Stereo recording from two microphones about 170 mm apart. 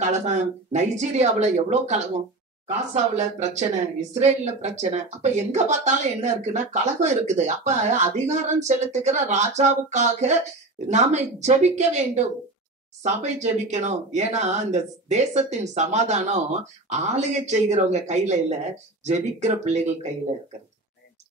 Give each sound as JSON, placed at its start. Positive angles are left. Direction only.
{"t": 0.0, "sound": "speech", "side_deg": -40}